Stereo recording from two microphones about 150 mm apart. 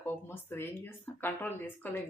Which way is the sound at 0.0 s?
15° left (ahead or behind).